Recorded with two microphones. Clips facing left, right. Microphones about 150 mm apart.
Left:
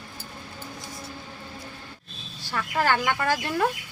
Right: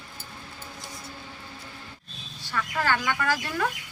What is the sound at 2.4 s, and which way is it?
Speech, 35° left (ahead or behind).